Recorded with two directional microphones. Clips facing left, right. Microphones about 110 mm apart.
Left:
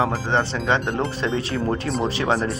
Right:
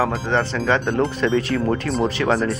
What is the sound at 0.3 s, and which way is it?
Speech, 25° left (ahead or behind).